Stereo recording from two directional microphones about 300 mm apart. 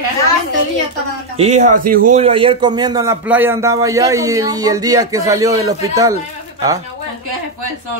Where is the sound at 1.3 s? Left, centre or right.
Right.